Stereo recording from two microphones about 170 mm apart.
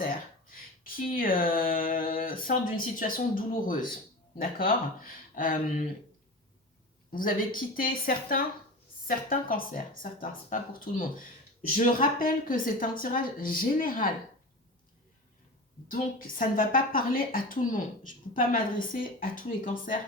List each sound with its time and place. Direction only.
0.9 s a woman's voice: 55° left (ahead or behind)
7.1 s a woman's voice: 55° left (ahead or behind)
15.9 s a woman's voice: 55° left (ahead or behind)